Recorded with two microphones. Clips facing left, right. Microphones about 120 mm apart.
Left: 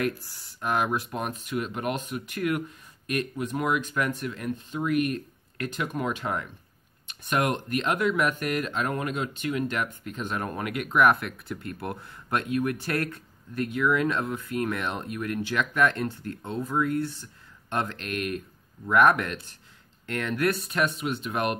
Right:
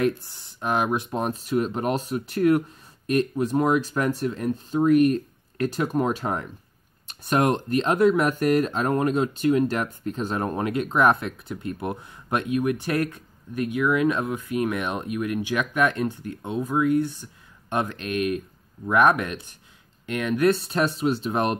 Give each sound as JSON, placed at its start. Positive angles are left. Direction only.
{"t": 0.0, "sound": "speech", "side_deg": -25}